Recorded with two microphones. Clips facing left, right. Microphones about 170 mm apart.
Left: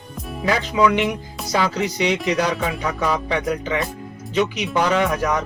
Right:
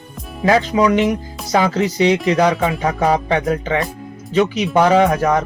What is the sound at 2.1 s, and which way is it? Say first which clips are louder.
Speech: right 5 dB; centre (ahead or behind).